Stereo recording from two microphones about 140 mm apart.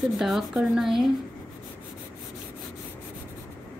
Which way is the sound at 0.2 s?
5° right (ahead or behind).